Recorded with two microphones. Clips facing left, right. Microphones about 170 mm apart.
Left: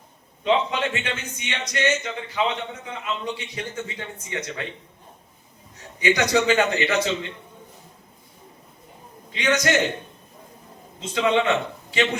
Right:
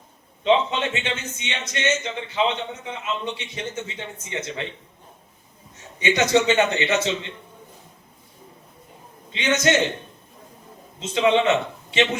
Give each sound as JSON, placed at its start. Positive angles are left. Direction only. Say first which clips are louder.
{"t": 0.4, "sound": "a man's voice", "louder": "right 2 dB", "side_deg": -25}
{"t": 6.0, "sound": "a man's voice", "louder": "right 1 dB", "side_deg": -25}
{"t": 9.3, "sound": "a man's voice", "louder": "right 1 dB", "side_deg": -25}
{"t": 11.0, "sound": "a man's voice", "louder": "right 2 dB", "side_deg": -25}